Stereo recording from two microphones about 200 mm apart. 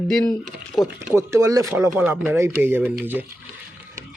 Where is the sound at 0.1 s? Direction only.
Centre (ahead or behind).